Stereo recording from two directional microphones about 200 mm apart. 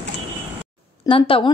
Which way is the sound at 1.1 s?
25° left (ahead or behind).